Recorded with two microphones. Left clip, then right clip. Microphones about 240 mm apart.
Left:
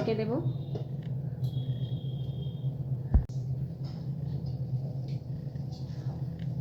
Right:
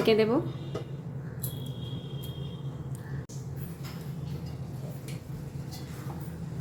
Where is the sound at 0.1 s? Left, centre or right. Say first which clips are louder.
Right 10 dB; right.